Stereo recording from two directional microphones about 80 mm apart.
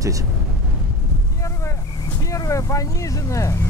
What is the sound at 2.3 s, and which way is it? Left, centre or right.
Vehicle, left.